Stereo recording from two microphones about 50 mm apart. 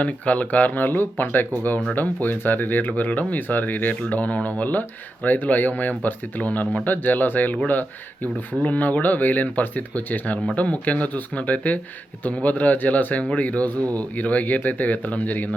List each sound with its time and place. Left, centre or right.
0.0 s speech: left